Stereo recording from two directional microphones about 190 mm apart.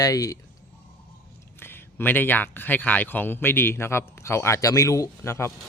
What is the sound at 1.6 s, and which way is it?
Speech, 10° left (ahead or behind).